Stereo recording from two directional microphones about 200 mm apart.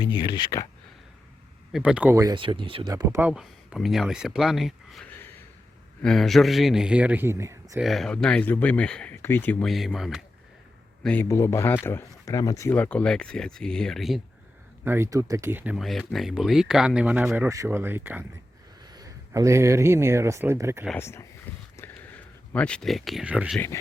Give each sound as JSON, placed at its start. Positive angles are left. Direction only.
{"t": 0.0, "sound": "speech", "side_deg": 20}
{"t": 1.7, "sound": "speech", "side_deg": -5}
{"t": 7.8, "sound": "speech", "side_deg": 0}
{"t": 14.8, "sound": "speech", "side_deg": -15}
{"t": 20.8, "sound": "speech", "side_deg": 10}
{"t": 21.5, "sound": "a sound", "side_deg": 10}
{"t": 22.5, "sound": "speech", "side_deg": 5}